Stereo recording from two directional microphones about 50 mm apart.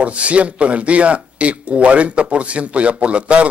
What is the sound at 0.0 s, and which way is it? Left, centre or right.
Speech, right.